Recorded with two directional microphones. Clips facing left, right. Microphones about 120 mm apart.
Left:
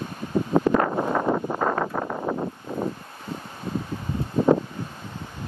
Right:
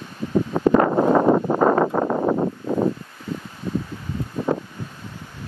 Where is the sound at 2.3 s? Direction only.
75° right (ahead or behind).